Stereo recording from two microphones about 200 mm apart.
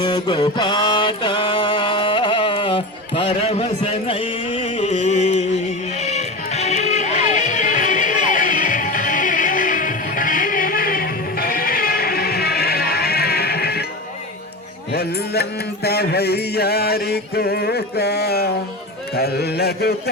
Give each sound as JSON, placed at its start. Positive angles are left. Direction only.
{"t": 0.0, "sound": "mantra", "side_deg": 20}
{"t": 6.0, "sound": "music", "side_deg": 35}
{"t": 14.9, "sound": "music", "side_deg": 55}